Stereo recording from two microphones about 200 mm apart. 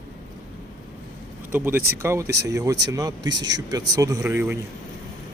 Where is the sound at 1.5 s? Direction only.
10° right (ahead or behind).